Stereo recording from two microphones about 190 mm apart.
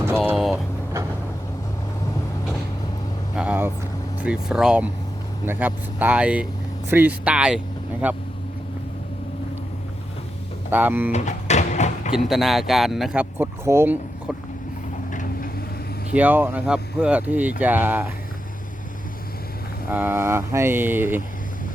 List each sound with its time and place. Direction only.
0.3 s vehicle: centre (ahead or behind)
3.3 s vehicle: 5° right (ahead or behind)
4.2 s speech: 5° right (ahead or behind)
10.7 s speech: 10° right (ahead or behind)
11.1 s a sound: 35° left (ahead or behind)
12.1 s speech: centre (ahead or behind)
15.1 s vehicle: 40° left (ahead or behind)
16.1 s speech: 10° right (ahead or behind)
19.9 s speech: 10° right (ahead or behind)